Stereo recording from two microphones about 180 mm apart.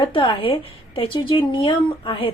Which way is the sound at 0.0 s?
30° left (ahead or behind).